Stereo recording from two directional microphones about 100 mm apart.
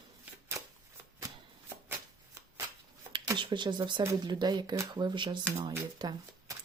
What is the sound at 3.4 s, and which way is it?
Speech, 50° right (ahead or behind).